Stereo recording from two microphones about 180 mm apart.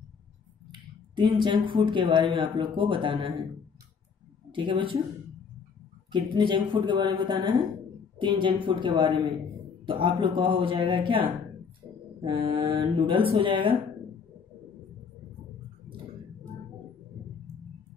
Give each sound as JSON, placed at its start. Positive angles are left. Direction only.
{"t": 0.7, "sound": "speech", "side_deg": -25}
{"t": 4.5, "sound": "speech", "side_deg": -25}
{"t": 6.1, "sound": "speech", "side_deg": -25}